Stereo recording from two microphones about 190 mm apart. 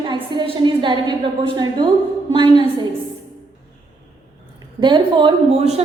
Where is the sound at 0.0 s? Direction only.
25° right (ahead or behind).